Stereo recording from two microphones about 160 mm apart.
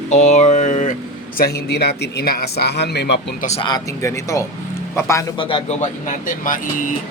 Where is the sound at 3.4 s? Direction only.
45° left (ahead or behind).